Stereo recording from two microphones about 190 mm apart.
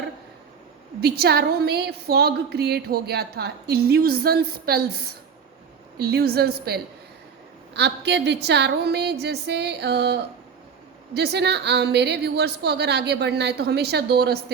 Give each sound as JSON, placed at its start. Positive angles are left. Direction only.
{"t": 1.0, "sound": "a woman's voice", "side_deg": -55}